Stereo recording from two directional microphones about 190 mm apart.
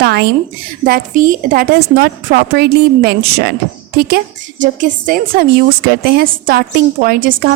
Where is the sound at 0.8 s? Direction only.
45° right (ahead or behind).